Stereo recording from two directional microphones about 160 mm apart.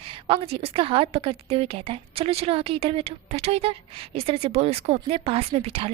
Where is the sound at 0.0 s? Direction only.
35° right (ahead or behind).